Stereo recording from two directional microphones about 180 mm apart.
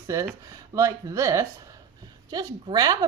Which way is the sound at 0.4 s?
15° right (ahead or behind).